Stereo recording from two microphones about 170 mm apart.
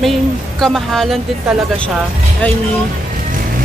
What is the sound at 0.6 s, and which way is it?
Speech, centre (ahead or behind).